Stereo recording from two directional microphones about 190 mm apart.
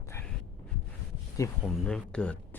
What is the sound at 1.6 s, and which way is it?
Speech, 5° left (ahead or behind).